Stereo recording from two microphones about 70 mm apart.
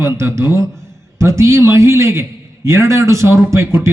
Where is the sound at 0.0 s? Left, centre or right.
Right.